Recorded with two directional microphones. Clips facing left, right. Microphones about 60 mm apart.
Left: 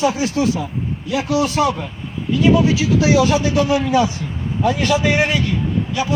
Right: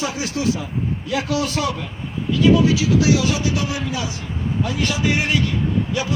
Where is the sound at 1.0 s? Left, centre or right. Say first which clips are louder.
Left 5 dB; left.